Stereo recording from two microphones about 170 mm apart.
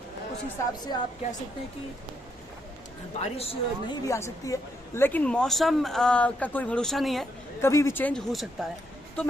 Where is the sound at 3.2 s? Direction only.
35° left (ahead or behind).